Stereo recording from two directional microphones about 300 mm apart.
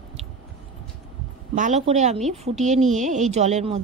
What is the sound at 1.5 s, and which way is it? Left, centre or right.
A woman's voice, right.